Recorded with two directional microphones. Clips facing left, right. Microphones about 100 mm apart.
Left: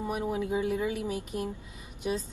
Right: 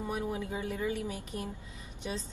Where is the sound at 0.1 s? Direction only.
15° left (ahead or behind).